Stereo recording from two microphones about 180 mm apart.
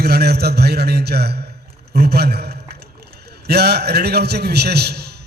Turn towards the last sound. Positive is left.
turn(degrees=-65)  # may be behind; listen again after turning